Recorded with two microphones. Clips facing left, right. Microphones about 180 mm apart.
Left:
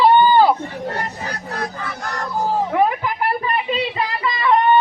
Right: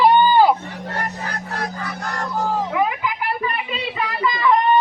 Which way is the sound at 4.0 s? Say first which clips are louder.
Even; 30° left (ahead or behind).